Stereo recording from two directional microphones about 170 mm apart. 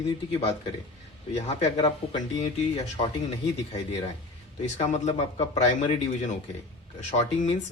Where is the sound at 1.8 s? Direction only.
30° left (ahead or behind).